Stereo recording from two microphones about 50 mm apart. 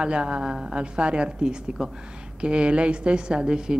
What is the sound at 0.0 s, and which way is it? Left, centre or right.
A man's voice, centre.